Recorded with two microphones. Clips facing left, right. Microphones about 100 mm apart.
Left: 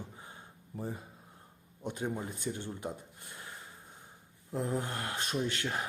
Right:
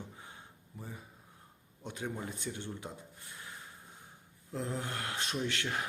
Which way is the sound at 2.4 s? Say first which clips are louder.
Left 3 dB; 40° left (ahead or behind).